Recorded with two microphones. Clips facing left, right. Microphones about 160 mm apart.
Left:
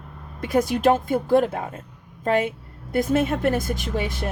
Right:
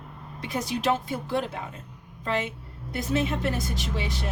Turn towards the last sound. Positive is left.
turn(degrees=50)  # may be behind; listen again after turning